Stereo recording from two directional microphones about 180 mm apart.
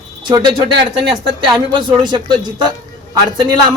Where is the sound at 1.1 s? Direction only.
25° right (ahead or behind).